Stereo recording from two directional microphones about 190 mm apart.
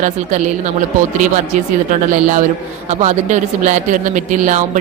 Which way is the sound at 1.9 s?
45° right (ahead or behind).